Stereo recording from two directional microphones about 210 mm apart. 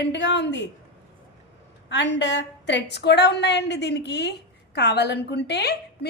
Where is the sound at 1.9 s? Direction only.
55° left (ahead or behind).